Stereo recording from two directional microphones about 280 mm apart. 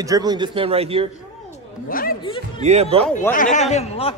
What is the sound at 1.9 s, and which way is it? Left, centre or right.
Speech, left.